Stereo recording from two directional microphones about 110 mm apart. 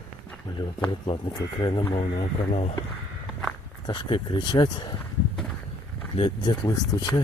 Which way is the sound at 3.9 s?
45° left (ahead or behind).